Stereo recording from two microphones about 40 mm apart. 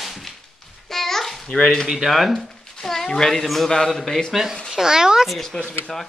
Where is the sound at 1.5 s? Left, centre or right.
Centre.